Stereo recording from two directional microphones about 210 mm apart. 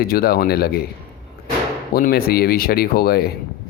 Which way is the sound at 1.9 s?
45° left (ahead or behind).